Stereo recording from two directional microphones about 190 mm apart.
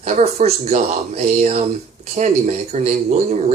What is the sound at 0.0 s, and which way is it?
Speech, 35° right (ahead or behind).